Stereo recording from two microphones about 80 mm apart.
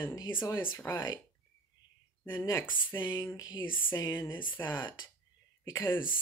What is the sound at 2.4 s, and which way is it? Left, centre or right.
Speech, left.